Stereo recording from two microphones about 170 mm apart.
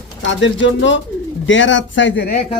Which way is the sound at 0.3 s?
90° left.